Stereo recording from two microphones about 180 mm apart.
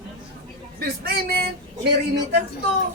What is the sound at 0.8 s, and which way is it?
Speech, 60° right (ahead or behind).